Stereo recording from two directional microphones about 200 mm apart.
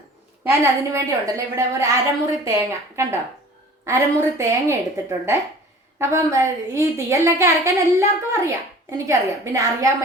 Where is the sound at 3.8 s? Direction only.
15° right (ahead or behind).